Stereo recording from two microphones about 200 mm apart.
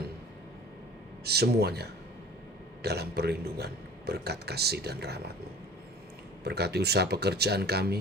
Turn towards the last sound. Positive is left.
turn(degrees=-50)  # may be behind; listen again after turning